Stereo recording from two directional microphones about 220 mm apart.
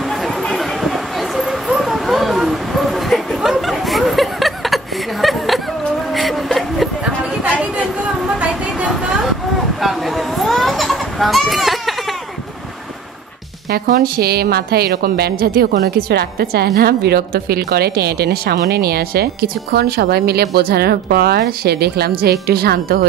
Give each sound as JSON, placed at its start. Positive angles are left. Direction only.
{"t": 0.1, "sound": "a sound", "side_deg": 0}
{"t": 9.8, "sound": "children playing", "side_deg": 0}
{"t": 13.7, "sound": "a woman's voice", "side_deg": -40}